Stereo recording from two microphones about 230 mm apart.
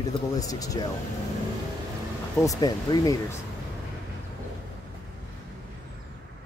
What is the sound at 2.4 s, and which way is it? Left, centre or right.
Speech, centre.